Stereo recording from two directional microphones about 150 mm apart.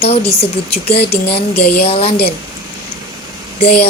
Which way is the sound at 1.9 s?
40° left (ahead or behind).